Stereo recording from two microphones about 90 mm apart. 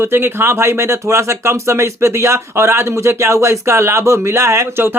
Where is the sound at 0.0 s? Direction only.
25° right (ahead or behind).